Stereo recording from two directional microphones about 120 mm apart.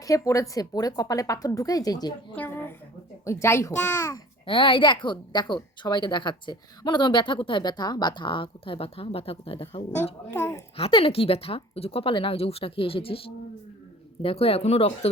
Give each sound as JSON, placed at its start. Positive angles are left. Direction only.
{"t": 0.0, "sound": "a woman's voice", "side_deg": 30}
{"t": 2.3, "sound": "a sound", "side_deg": 15}
{"t": 3.2, "sound": "a child's voice", "side_deg": 25}
{"t": 4.4, "sound": "a woman's voice", "side_deg": 45}
{"t": 10.3, "sound": "a child's voice", "side_deg": 20}
{"t": 10.8, "sound": "speech", "side_deg": 50}